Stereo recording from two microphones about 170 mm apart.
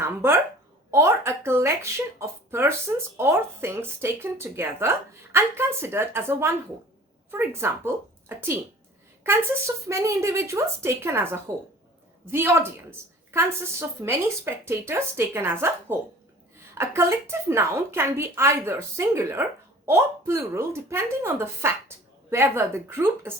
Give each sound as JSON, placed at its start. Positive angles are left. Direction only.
{"t": 0.0, "sound": "a woman's voice", "side_deg": -15}